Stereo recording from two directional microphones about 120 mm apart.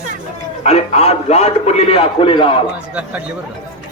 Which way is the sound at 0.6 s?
65° left (ahead or behind).